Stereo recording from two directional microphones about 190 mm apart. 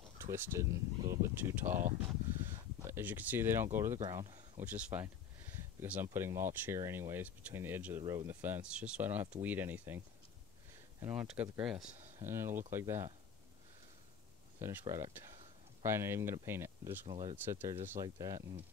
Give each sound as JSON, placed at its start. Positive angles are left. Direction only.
{"t": 0.2, "sound": "speech", "side_deg": -15}
{"t": 2.8, "sound": "speech", "side_deg": -10}
{"t": 4.6, "sound": "speech", "side_deg": -5}
{"t": 14.6, "sound": "speech", "side_deg": -10}
{"t": 17.1, "sound": "speech", "side_deg": -25}
{"t": 17.5, "sound": "speech", "side_deg": -15}